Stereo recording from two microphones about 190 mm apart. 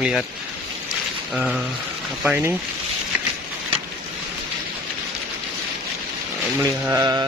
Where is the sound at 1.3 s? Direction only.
5° right (ahead or behind).